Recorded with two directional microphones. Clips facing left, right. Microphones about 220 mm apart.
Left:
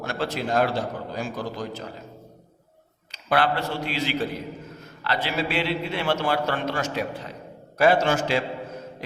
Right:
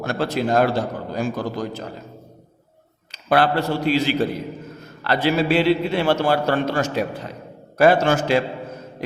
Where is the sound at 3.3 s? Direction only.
40° right (ahead or behind).